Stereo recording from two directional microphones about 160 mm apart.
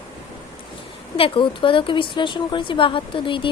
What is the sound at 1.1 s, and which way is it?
A woman's voice, 35° left (ahead or behind).